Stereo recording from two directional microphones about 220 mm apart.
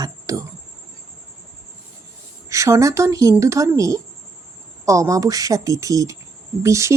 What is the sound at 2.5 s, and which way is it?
Speech, 15° right (ahead or behind).